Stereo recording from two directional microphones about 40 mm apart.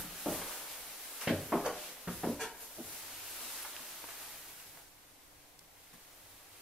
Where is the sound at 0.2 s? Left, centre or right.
Centre.